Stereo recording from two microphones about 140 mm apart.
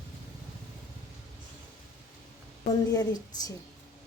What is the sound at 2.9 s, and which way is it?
Speech, 25° left (ahead or behind).